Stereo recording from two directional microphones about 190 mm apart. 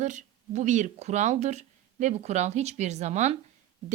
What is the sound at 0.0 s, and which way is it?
Speech, 40° right (ahead or behind).